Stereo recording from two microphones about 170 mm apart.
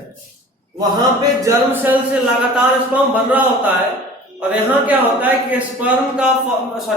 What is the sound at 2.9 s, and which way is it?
A man's voice, 10° right (ahead or behind).